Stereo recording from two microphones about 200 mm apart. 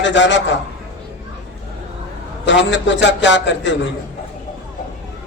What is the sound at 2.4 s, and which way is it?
A man's voice, 65° left (ahead or behind).